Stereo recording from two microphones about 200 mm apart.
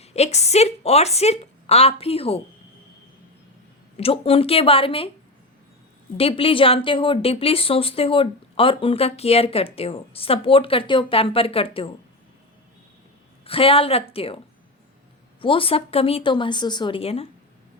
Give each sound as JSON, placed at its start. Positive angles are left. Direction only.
{"t": 0.0, "sound": "a woman's voice", "side_deg": 30}
{"t": 3.9, "sound": "a woman's voice", "side_deg": 30}
{"t": 6.1, "sound": "a woman's voice", "side_deg": 30}
{"t": 13.4, "sound": "a woman's voice", "side_deg": 30}
{"t": 15.4, "sound": "a woman's voice", "side_deg": 25}